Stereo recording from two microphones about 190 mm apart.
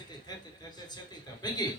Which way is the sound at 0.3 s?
20° left (ahead or behind).